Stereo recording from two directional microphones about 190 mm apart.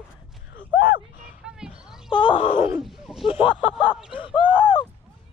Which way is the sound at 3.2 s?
25° left (ahead or behind).